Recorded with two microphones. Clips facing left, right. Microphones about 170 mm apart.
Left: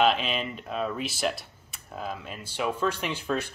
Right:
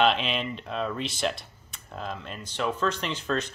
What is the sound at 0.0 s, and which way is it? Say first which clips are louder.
Speech: even; centre (ahead or behind).